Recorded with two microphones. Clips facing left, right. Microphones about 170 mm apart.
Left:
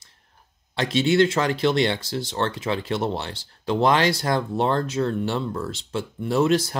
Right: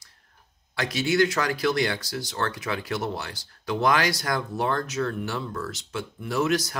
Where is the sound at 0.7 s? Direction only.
25° left (ahead or behind).